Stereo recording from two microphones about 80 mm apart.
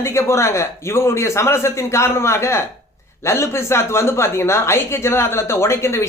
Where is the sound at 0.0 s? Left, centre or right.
Left.